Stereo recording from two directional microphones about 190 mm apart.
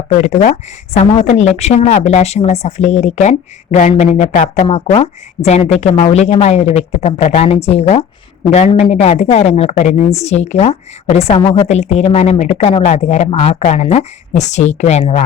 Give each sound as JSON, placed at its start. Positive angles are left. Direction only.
{"t": 0.2, "sound": "a woman's voice", "side_deg": 40}